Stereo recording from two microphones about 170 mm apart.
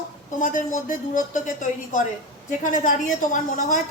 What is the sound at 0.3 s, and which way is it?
A woman's voice, 50° left (ahead or behind).